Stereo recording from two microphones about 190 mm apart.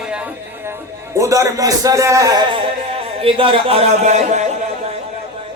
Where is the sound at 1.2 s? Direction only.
15° right (ahead or behind); by 4.5 s 40° right (ahead or behind).